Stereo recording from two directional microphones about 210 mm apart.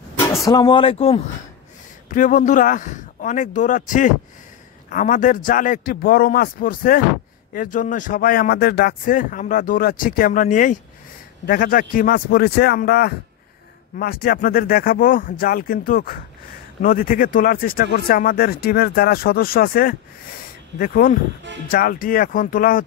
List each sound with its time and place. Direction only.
0.5 s speech: 20° left (ahead or behind)
2.0 s speech: 40° left (ahead or behind)